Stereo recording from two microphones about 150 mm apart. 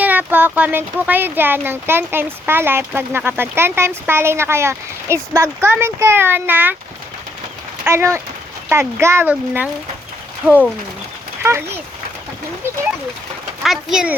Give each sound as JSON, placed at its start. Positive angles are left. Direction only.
{"t": 0.0, "sound": "speech", "side_deg": -10}
{"t": 7.9, "sound": "speech", "side_deg": -15}
{"t": 13.6, "sound": "speech", "side_deg": 0}